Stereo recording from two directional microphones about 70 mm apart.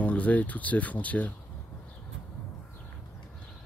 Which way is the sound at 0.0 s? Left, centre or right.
Left.